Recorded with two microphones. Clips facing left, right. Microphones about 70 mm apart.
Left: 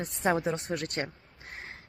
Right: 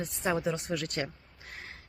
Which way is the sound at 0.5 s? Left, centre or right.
Left.